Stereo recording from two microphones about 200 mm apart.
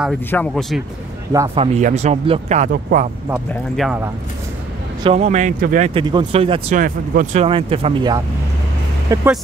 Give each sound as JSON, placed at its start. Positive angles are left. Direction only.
{"t": 0.3, "sound": "speech", "side_deg": 5}
{"t": 1.5, "sound": "speech", "side_deg": -30}
{"t": 3.7, "sound": "speech", "side_deg": 0}
{"t": 5.0, "sound": "speech", "side_deg": -30}
{"t": 5.9, "sound": "speech", "side_deg": -25}
{"t": 6.8, "sound": "speech", "side_deg": -40}
{"t": 7.4, "sound": "speech", "side_deg": -25}